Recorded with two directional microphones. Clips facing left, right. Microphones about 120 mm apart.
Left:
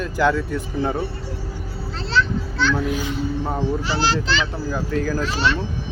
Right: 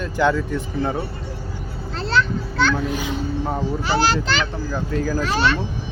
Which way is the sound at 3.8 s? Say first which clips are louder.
Right 2 dB; 55° right (ahead or behind).